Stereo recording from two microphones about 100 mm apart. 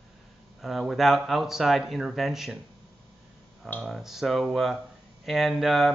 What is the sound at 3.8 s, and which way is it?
Speech, centre (ahead or behind).